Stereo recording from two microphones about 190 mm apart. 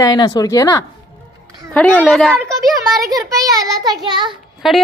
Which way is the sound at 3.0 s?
20° right (ahead or behind).